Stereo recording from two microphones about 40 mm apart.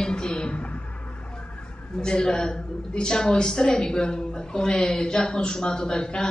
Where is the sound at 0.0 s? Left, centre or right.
Left.